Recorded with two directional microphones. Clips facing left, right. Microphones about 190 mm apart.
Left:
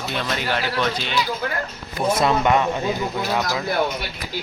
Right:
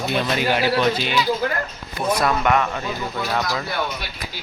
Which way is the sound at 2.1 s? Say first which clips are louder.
Left 1 dB; 25° left (ahead or behind).